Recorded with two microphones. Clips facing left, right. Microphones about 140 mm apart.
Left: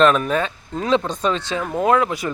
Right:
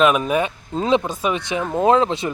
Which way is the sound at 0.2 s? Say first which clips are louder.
Right 1 dB; 15° right (ahead or behind).